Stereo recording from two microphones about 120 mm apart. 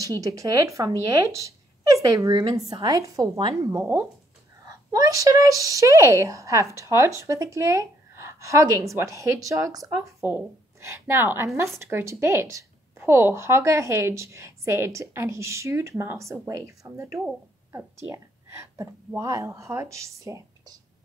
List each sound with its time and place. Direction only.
0.0 s a woman's voice: 30° right (ahead or behind)